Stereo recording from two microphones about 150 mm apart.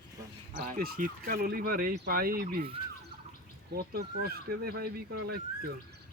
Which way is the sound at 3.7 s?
90° right.